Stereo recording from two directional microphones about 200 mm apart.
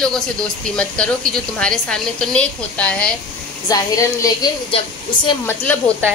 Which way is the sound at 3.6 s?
20° left (ahead or behind).